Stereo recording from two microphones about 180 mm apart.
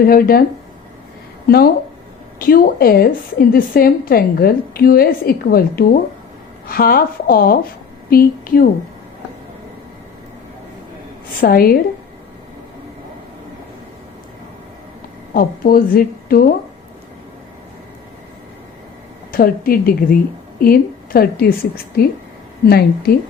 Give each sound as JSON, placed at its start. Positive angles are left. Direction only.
{"t": 0.0, "sound": "a woman's voice", "side_deg": 55}
{"t": 1.5, "sound": "a woman's voice", "side_deg": 60}
{"t": 11.3, "sound": "a woman's voice", "side_deg": 55}
{"t": 15.3, "sound": "a woman's voice", "side_deg": 55}
{"t": 19.3, "sound": "a woman's voice", "side_deg": 55}
{"t": 22.6, "sound": "a woman's voice", "side_deg": 60}